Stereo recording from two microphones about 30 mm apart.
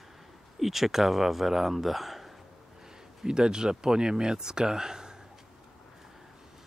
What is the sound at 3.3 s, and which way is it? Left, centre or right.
Speech, right.